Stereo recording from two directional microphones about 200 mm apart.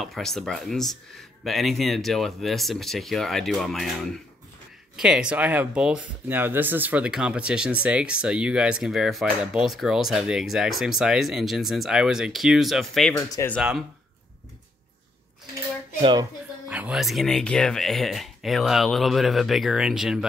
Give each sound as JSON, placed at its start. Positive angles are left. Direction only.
{"t": 0.0, "sound": "speech", "side_deg": 0}
{"t": 4.9, "sound": "speech", "side_deg": -5}
{"t": 13.1, "sound": "speech", "side_deg": 15}
{"t": 13.6, "sound": "speech", "side_deg": 0}
{"t": 16.0, "sound": "speech", "side_deg": -20}
{"t": 16.6, "sound": "speech", "side_deg": -5}